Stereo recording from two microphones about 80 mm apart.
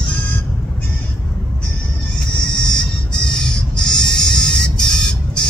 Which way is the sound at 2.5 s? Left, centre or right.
Centre.